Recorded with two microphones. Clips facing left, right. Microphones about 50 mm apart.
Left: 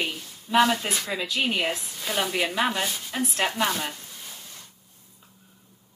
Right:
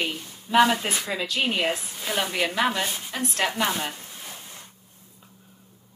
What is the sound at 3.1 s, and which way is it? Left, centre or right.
Speech, centre.